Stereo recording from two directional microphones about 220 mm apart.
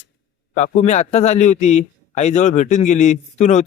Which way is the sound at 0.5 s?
30° left (ahead or behind).